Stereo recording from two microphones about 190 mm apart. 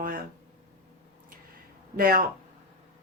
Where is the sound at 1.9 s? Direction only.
50° right (ahead or behind).